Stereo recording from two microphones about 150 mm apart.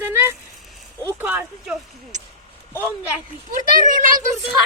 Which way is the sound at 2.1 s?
55° right (ahead or behind).